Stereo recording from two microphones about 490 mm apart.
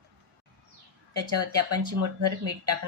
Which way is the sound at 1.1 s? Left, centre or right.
Right.